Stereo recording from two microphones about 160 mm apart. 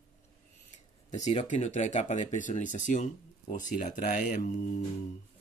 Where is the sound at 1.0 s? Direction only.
45° left (ahead or behind).